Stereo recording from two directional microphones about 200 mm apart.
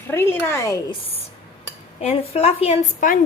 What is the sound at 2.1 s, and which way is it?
A woman's voice, 30° left (ahead or behind).